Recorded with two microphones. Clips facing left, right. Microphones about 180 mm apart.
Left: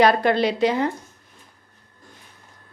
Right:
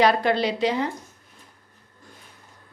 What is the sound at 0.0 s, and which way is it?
Speech, 50° left (ahead or behind).